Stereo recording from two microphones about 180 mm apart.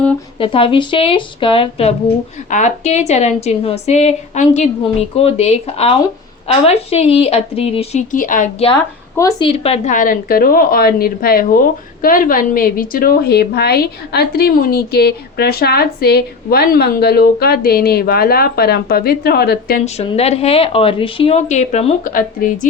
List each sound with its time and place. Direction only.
0.3 s a woman's voice: 30° left (ahead or behind)
8.1 s a woman's voice: 50° left (ahead or behind)
8.5 s a woman's voice: 30° left (ahead or behind)
9.1 s speech: 20° left (ahead or behind)
9.5 s a woman's voice: 35° left (ahead or behind); by 19.8 s 60° left (ahead or behind)
19.8 s a woman's voice: 35° left (ahead or behind)